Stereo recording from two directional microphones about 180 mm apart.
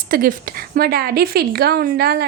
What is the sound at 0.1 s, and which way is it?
A woman's voice, 50° right (ahead or behind).